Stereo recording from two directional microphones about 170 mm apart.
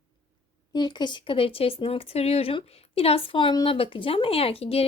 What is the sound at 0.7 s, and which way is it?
A woman's voice, 25° left (ahead or behind).